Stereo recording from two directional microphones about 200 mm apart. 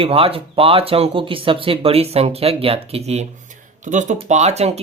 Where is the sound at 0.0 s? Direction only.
30° right (ahead or behind).